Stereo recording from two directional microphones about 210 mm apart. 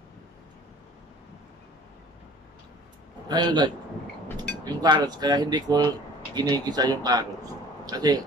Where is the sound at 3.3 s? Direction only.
20° right (ahead or behind).